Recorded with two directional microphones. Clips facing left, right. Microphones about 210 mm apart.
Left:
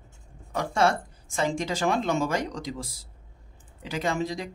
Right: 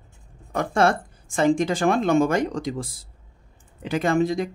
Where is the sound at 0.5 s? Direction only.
55° right (ahead or behind).